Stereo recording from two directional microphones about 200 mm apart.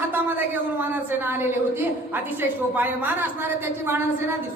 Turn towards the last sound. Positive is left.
turn(degrees=-10)  # may be behind; listen again after turning